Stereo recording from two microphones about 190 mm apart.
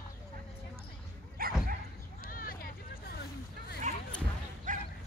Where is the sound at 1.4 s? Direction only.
50° right (ahead or behind).